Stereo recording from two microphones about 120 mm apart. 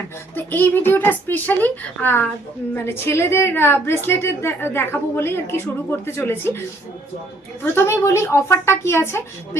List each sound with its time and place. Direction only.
0.3 s a woman's voice: 15° left (ahead or behind)